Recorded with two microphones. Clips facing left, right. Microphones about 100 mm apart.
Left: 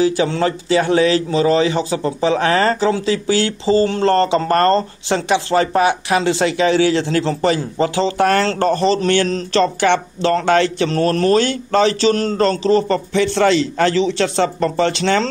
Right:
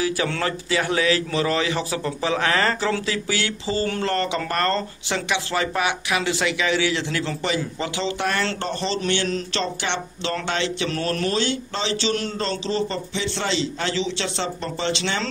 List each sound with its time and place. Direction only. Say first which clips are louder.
0.0 s speech: left 8 dB; 25° left (ahead or behind); by 10.9 s 45° left (ahead or behind)
10.9 s a man's voice: left 9 dB; 35° left (ahead or behind)